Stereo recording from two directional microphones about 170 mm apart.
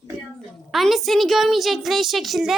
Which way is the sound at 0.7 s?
Centre (ahead or behind).